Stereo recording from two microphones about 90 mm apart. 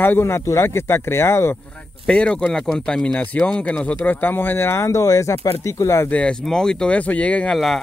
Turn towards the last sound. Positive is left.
turn(degrees=15)  # may be behind; listen again after turning